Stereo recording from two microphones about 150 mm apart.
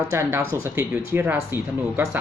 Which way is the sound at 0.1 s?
20° right (ahead or behind).